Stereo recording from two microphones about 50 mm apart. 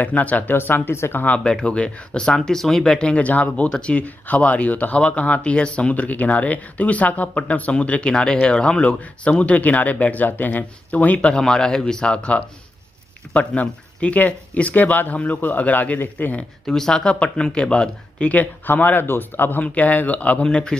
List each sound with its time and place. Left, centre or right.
0.0 s speech: left
1.3 s speech: centre; by 16.3 s left
16.6 s speech: centre
18.3 s speech: left
19.6 s speech: left